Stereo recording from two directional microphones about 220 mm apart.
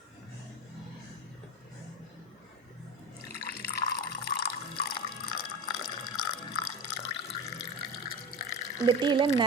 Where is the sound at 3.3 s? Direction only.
45° left (ahead or behind).